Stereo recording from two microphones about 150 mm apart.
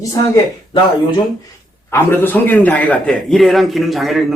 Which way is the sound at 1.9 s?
15° left (ahead or behind).